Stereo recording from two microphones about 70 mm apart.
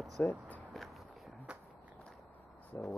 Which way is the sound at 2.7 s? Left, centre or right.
Centre.